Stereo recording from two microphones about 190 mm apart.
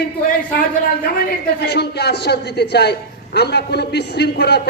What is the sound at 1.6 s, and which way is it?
A man's voice, 60° left (ahead or behind).